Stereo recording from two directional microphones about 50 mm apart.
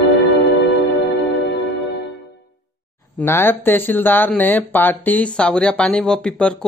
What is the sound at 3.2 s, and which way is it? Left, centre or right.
Speech, left.